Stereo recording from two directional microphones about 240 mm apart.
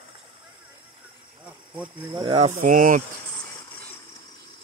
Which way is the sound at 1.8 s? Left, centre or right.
Centre.